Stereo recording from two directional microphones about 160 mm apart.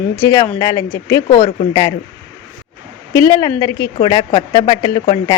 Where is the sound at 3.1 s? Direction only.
20° left (ahead or behind).